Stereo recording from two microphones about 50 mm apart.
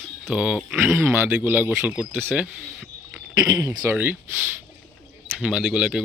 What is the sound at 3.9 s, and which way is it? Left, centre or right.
Speech, right.